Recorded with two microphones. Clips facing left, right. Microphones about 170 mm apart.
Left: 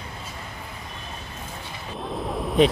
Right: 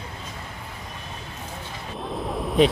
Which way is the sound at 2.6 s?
Centre (ahead or behind).